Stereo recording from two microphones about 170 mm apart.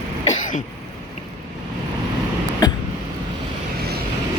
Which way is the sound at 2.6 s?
20° left (ahead or behind).